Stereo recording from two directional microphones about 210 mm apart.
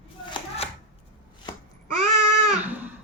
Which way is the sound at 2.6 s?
10° right (ahead or behind).